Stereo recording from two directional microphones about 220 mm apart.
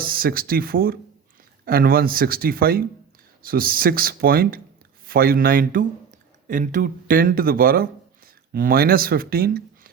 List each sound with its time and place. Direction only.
0.0 s speech: 40° right (ahead or behind)